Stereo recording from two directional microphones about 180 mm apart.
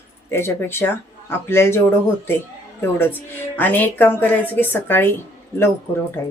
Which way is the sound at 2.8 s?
10° left (ahead or behind).